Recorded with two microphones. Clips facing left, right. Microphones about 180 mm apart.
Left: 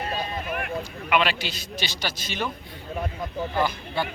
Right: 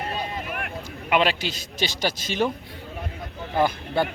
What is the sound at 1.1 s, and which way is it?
A man's voice, 40° right (ahead or behind).